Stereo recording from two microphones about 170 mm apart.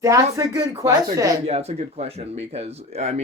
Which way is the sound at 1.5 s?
40° right (ahead or behind).